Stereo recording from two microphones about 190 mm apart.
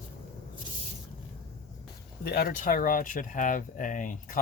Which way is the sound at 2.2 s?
55° left (ahead or behind).